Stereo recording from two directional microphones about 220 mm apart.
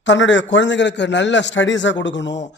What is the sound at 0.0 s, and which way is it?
A man's voice, 55° left (ahead or behind).